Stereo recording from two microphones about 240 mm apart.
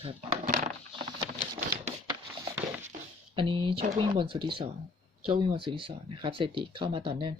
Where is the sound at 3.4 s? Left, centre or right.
Right.